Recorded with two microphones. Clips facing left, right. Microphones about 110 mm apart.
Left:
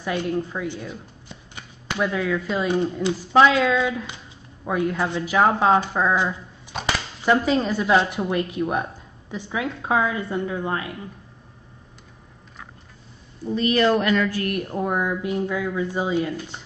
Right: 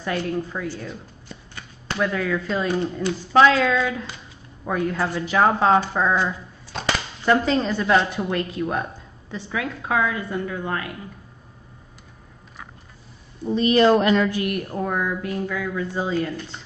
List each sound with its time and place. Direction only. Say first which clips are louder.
0.2 s speech: left 1 dB; 15° left (ahead or behind)
0.7 s shuffling cards: even; 15° left (ahead or behind)
2.0 s speech: even; 5° left (ahead or behind)
6.1 s a woman's voice: even; 15° left (ahead or behind)
13.5 s a woman's voice: right 3 dB; 25° right (ahead or behind)
14.4 s speech: even; 5° right (ahead or behind)
14.8 s speech: left 2 dB; 15° left (ahead or behind)